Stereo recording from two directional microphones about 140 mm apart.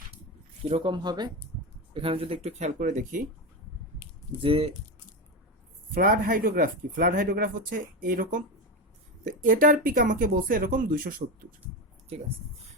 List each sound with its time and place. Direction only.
0.7 s speech: 40° right (ahead or behind); by 3.2 s 60° right (ahead or behind)
4.4 s speech: 40° right (ahead or behind)
5.9 s speech: 90° right